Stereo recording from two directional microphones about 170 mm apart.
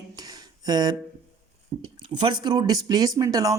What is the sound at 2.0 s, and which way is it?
Speech, 25° right (ahead or behind).